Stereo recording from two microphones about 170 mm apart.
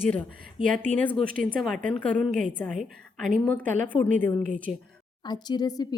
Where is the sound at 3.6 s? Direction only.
50° right (ahead or behind).